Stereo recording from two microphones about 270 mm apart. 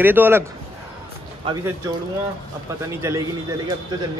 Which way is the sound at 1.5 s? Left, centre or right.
Centre.